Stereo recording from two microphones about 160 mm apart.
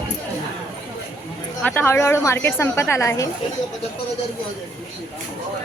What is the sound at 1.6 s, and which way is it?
A woman's voice, 10° left (ahead or behind).